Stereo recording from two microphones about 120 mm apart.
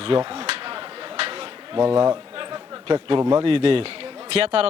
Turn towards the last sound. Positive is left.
turn(degrees=-55)  # may be behind; listen again after turning